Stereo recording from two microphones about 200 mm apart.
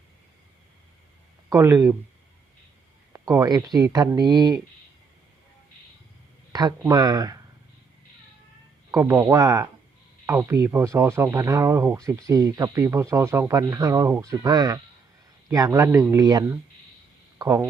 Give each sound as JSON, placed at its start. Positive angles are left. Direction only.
{"t": 1.5, "sound": "speech", "side_deg": -15}
{"t": 3.1, "sound": "speech", "side_deg": -15}
{"t": 6.5, "sound": "speech", "side_deg": -20}
{"t": 8.9, "sound": "speech", "side_deg": -15}